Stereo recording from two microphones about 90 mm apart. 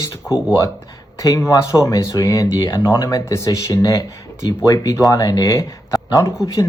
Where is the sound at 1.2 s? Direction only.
35° left (ahead or behind).